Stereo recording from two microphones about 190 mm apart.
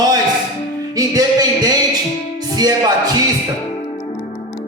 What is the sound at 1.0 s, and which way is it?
A man's voice, 20° right (ahead or behind).